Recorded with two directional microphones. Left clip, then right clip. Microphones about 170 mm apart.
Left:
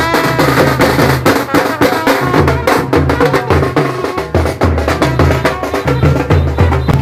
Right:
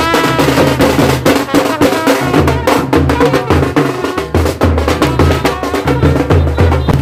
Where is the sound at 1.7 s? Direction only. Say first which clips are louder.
Even; 80° right; by 6.6 s 45° right (ahead or behind).